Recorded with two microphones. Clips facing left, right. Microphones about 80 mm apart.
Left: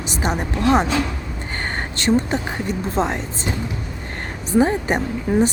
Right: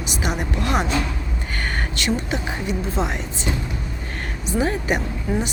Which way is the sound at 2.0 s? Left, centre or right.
Left.